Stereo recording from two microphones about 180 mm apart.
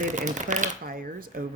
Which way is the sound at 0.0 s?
40° right (ahead or behind).